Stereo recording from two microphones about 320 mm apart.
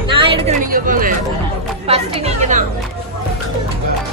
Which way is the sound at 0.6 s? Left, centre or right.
Right.